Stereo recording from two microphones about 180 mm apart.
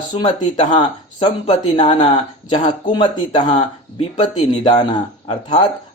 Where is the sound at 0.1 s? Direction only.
25° left (ahead or behind).